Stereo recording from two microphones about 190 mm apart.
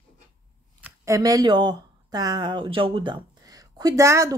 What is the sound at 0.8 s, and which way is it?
Speech, 15° right (ahead or behind).